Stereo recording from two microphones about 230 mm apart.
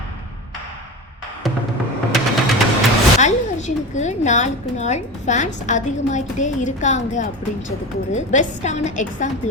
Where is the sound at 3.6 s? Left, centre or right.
Left.